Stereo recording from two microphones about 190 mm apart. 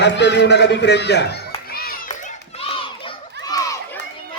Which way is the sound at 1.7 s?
50° left (ahead or behind).